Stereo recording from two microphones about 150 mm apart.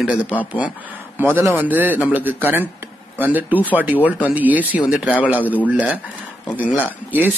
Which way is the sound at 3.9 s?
10° left (ahead or behind).